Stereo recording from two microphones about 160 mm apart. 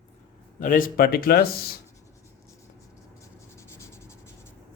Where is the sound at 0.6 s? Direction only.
60° left (ahead or behind).